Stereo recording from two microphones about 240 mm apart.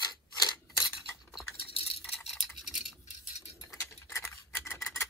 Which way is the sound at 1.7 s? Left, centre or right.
Left.